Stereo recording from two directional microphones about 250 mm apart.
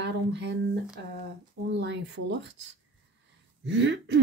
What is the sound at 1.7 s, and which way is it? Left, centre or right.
Speech, right.